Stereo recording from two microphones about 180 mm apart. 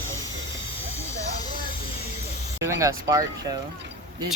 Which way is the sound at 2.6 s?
15° right (ahead or behind).